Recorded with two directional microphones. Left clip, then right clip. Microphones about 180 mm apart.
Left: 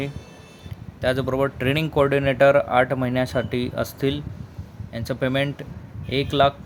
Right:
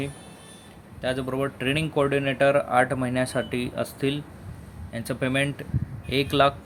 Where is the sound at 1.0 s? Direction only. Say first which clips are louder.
Left 5 dB; 20° left (ahead or behind).